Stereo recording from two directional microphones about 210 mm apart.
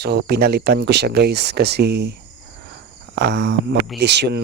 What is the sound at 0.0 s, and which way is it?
Speech, 50° right (ahead or behind).